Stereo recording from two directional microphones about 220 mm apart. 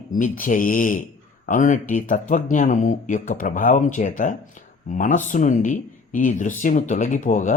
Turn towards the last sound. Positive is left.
turn(degrees=35)  # may be behind; listen again after turning